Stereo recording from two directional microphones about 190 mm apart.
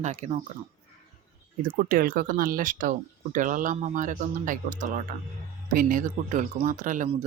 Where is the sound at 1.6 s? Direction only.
50° right (ahead or behind).